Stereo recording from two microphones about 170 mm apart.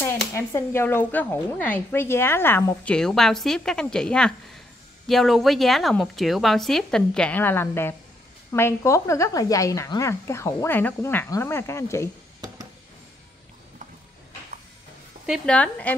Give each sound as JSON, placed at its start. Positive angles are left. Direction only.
{"t": 0.3, "sound": "speech", "side_deg": 15}
{"t": 2.9, "sound": "a woman's voice", "side_deg": 5}
{"t": 15.2, "sound": "speech", "side_deg": 0}